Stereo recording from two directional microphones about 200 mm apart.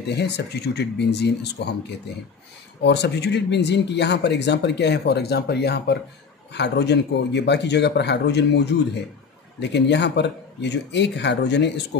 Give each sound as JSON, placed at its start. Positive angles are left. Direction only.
{"t": 0.1, "sound": "speech", "side_deg": 55}